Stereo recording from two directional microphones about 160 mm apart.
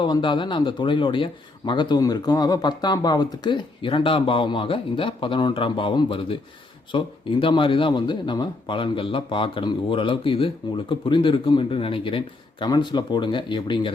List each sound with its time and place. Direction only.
0.0 s speech: 30° left (ahead or behind)